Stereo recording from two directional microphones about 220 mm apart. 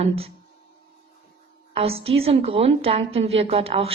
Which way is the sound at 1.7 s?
25° right (ahead or behind).